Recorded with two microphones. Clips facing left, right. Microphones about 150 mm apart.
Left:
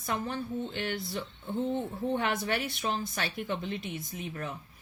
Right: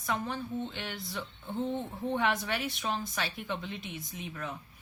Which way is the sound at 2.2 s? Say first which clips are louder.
Even; 50° left (ahead or behind).